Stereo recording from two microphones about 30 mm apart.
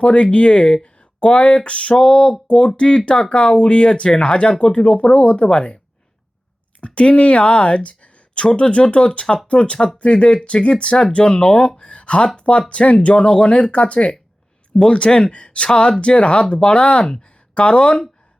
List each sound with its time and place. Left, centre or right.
0.0 s speech: left
2.0 s a sound: left
2.5 s speech: left
6.8 s speech: left
11.8 s a sound: left
12.4 s speech: left